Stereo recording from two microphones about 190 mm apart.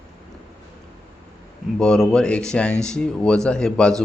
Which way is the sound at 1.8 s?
5° left (ahead or behind).